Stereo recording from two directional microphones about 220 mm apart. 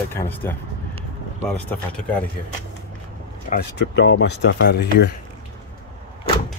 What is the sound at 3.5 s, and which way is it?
Speech, 50° left (ahead or behind).